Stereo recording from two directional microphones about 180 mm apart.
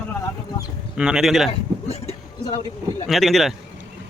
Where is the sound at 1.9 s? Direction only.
35° left (ahead or behind).